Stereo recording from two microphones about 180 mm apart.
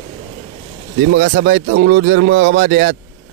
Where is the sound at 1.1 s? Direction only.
75° right (ahead or behind).